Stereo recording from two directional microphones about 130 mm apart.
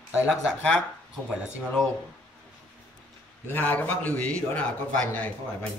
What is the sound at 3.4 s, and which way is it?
A man's voice, 15° left (ahead or behind).